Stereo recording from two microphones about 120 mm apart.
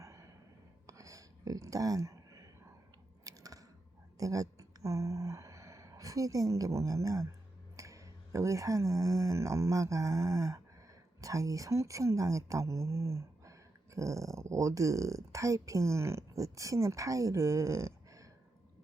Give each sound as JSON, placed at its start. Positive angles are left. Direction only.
{"t": 0.0, "sound": "a sound", "side_deg": -25}
{"t": 3.2, "sound": "chewing", "side_deg": -30}
{"t": 4.2, "sound": "speech", "side_deg": -30}